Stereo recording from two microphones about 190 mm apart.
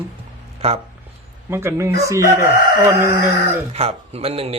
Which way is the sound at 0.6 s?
35° right (ahead or behind).